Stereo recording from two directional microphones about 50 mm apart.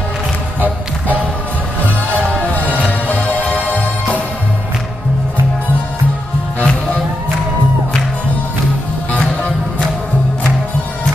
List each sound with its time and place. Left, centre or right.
3.1 s music: left
6.6 s music: left